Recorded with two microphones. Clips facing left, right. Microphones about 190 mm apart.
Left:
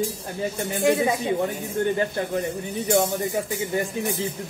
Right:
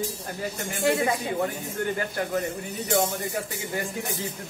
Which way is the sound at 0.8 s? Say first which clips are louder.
Left 3 dB; 20° left (ahead or behind).